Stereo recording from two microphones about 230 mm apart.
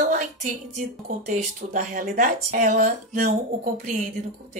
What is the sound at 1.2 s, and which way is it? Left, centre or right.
Speech, right.